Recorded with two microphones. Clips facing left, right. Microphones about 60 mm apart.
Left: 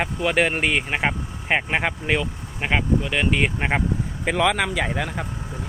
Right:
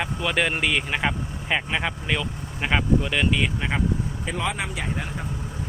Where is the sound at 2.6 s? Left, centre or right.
Centre.